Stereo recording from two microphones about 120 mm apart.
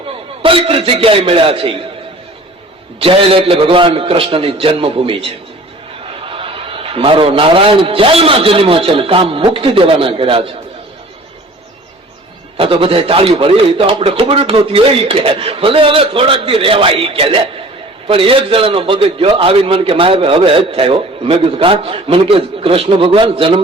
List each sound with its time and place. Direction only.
0.4 s a man's voice: 50° right (ahead or behind)
3.0 s a man's voice: 50° right (ahead or behind)
12.5 s a man's voice: 50° right (ahead or behind)